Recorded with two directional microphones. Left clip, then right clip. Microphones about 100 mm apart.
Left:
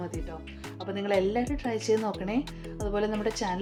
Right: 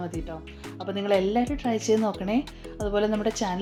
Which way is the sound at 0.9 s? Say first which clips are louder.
Right 3 dB; 35° right (ahead or behind).